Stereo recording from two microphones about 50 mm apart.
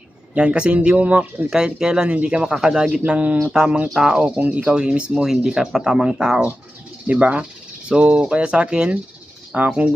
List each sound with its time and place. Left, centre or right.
0.3 s speech: right
1.5 s speech: centre
3.1 s speech: right
3.9 s speech: centre
4.4 s speech: right
5.2 s speech: centre